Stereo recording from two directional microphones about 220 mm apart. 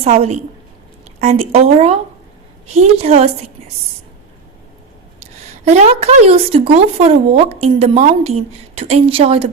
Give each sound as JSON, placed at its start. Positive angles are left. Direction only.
{"t": 0.0, "sound": "speech", "side_deg": -30}
{"t": 5.6, "sound": "speech", "side_deg": -30}